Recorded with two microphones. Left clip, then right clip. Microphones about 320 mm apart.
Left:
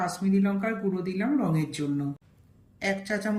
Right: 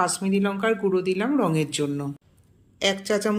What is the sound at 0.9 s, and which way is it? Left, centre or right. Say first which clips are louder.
Speech: right 6 dB; right.